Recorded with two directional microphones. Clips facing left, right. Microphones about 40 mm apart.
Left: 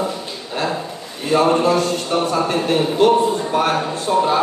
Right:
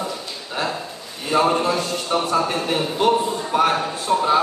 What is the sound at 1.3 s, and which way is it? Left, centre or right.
A man's voice, centre.